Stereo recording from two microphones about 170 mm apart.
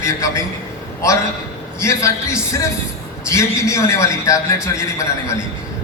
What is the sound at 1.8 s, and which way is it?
A man's voice, 15° left (ahead or behind).